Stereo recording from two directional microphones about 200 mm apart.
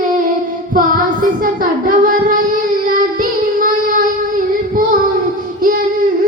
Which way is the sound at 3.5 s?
45° right (ahead or behind).